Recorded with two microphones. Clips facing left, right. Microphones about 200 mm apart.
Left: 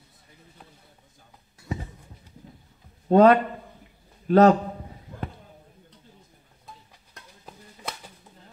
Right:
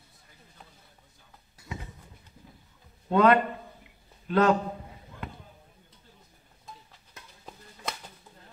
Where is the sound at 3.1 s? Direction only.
40° left (ahead or behind).